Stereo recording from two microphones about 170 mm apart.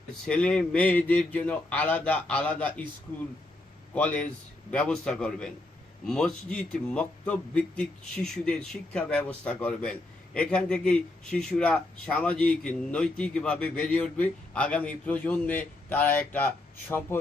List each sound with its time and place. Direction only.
0.3 s speech: 5° left (ahead or behind)
3.9 s speech: 10° left (ahead or behind)